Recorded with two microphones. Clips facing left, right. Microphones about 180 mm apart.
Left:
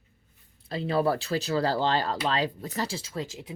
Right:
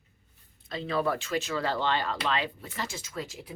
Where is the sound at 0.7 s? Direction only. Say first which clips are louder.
Left 3 dB; 30° left (ahead or behind).